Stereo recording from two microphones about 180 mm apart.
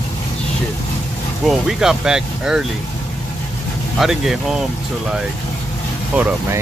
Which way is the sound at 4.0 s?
Centre (ahead or behind).